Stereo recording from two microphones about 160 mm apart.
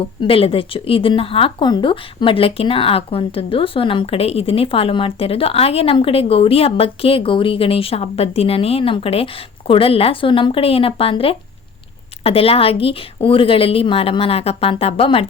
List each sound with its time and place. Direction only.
0.2 s speech: 35° left (ahead or behind)